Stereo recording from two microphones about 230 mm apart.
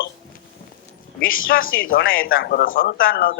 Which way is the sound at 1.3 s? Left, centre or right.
Left.